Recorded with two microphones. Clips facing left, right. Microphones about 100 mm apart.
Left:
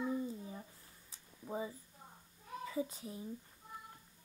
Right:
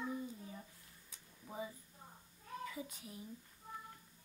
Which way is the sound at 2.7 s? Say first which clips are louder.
Left 8 dB; 30° left (ahead or behind).